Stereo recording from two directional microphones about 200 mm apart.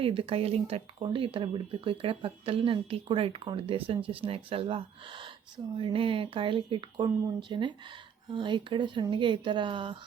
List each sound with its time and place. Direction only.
0.0 s speech: 30° right (ahead or behind)